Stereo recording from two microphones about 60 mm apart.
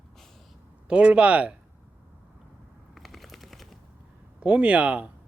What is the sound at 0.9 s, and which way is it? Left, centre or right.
Speech, centre.